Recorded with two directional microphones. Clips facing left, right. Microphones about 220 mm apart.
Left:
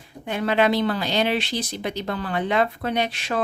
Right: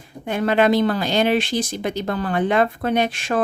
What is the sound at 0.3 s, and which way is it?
A woman's voice, 50° right (ahead or behind).